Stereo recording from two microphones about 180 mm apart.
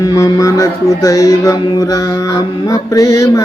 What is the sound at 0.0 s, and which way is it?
Music, 20° left (ahead or behind).